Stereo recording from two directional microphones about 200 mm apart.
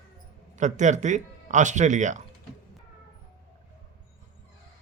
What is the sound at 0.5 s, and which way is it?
Speech, 35° right (ahead or behind).